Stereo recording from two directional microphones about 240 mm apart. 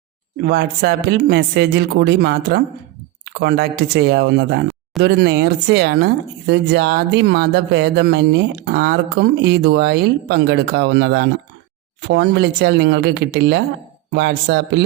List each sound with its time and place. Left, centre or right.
0.4 s speech: right